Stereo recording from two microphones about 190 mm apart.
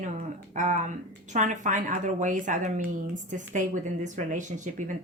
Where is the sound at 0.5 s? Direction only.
40° right (ahead or behind).